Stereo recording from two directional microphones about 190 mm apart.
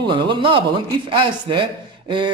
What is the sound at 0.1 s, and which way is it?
A man's voice, 25° right (ahead or behind).